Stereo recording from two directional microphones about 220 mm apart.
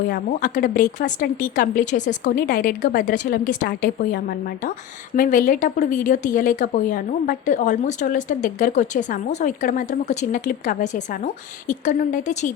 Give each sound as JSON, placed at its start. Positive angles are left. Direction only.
{"t": 0.1, "sound": "a woman's voice", "side_deg": 40}